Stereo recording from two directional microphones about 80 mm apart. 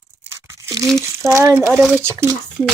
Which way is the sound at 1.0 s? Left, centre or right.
Right.